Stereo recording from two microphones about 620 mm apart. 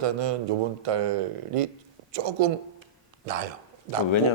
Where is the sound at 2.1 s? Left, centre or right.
Right.